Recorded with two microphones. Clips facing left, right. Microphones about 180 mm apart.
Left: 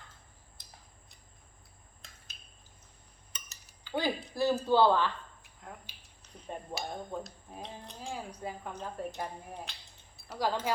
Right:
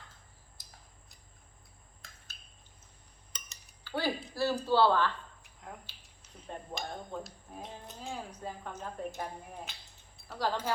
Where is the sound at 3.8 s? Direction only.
15° left (ahead or behind).